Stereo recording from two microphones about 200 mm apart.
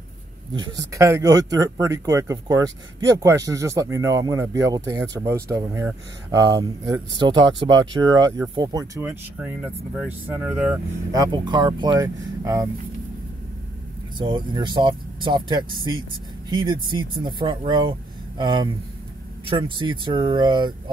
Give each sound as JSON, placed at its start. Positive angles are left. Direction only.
{"t": 0.5, "sound": "speech", "side_deg": -20}
{"t": 11.1, "sound": "speech", "side_deg": -20}
{"t": 14.1, "sound": "speech", "side_deg": -20}